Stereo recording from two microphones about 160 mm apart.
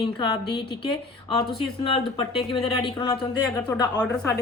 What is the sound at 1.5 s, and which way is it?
Speech, 35° left (ahead or behind).